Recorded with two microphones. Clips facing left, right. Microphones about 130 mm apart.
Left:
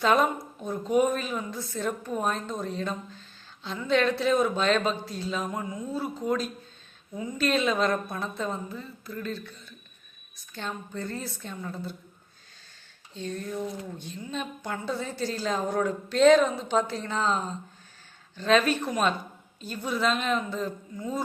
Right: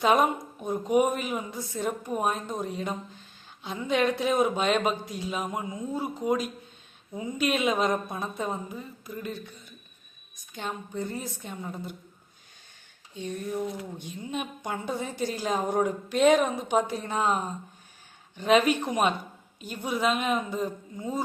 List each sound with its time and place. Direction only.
0.0 s a woman's voice: 15° right (ahead or behind)
13.1 s a woman's voice: 15° right (ahead or behind)